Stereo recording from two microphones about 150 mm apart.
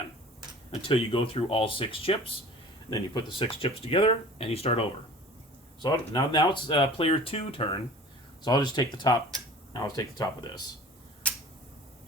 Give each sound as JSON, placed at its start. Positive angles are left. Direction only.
{"t": 0.7, "sound": "speech", "side_deg": 35}
{"t": 5.8, "sound": "speech", "side_deg": 30}